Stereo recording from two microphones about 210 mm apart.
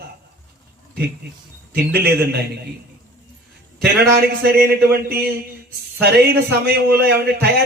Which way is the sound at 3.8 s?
50° right (ahead or behind).